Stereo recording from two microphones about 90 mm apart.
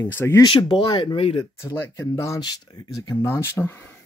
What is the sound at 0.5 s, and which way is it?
Speech, 80° left.